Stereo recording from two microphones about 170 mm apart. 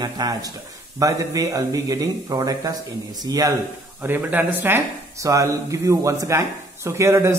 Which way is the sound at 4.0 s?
10° right (ahead or behind).